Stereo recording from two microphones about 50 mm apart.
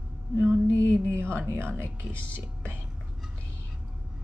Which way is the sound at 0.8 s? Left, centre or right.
Right.